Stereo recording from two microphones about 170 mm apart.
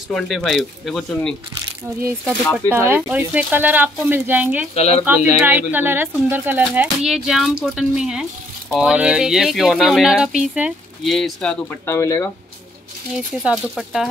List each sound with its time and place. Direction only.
0.1 s speech: centre (ahead or behind)
2.7 s speech: 10° right (ahead or behind)
4.7 s speech: 40° left (ahead or behind)
5.4 s speech: 10° right (ahead or behind); by 12.3 s 20° left (ahead or behind)
13.4 s speech: 5° right (ahead or behind)